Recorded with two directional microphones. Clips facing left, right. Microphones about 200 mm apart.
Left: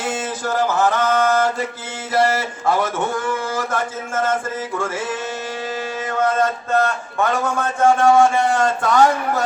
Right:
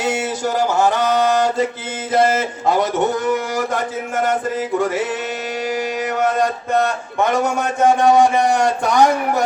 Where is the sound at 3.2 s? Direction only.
20° right (ahead or behind).